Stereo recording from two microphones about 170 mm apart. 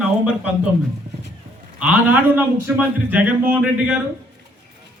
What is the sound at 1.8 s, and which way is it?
A man's voice, 10° right (ahead or behind).